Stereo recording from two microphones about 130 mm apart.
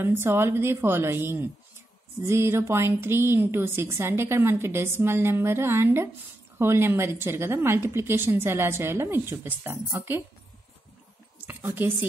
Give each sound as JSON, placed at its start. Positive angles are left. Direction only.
{"t": 0.0, "sound": "a woman's voice", "side_deg": -20}
{"t": 11.4, "sound": "a woman's voice", "side_deg": -15}